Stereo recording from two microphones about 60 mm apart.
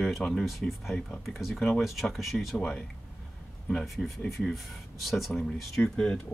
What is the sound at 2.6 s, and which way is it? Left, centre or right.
Speech, centre.